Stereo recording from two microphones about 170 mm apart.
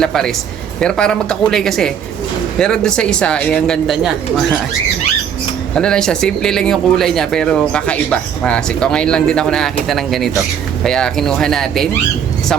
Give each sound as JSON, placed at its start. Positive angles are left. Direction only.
{"t": 0.0, "sound": "speech", "side_deg": 5}
{"t": 5.7, "sound": "speech", "side_deg": 5}